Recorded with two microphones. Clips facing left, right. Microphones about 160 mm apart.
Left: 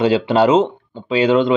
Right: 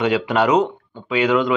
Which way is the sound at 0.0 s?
30° left (ahead or behind).